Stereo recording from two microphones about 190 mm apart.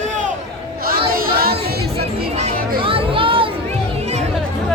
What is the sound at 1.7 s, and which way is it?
Music, 55° right (ahead or behind).